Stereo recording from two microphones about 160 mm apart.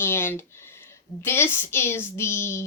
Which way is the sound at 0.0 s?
15° left (ahead or behind).